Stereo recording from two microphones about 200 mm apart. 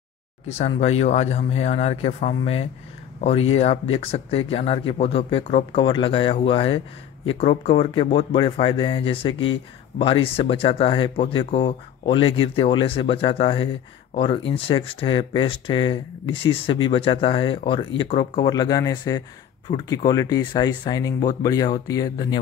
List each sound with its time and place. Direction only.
0.5 s speech: 35° left (ahead or behind)